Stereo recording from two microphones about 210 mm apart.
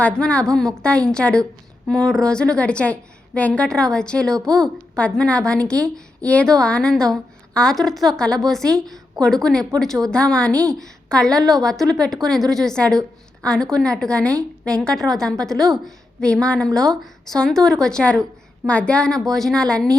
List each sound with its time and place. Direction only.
0.0 s a woman's voice: 5° left (ahead or behind)